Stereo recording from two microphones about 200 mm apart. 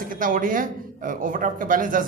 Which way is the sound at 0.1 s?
45° right (ahead or behind).